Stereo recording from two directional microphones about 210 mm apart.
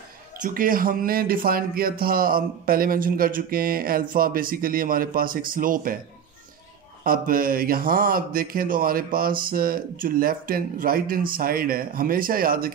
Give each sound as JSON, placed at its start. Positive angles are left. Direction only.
{"t": 0.4, "sound": "speech", "side_deg": -40}
{"t": 7.1, "sound": "speech", "side_deg": -45}